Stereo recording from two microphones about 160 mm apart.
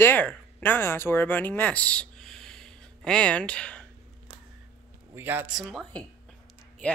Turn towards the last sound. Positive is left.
turn(degrees=5)  # may be behind; listen again after turning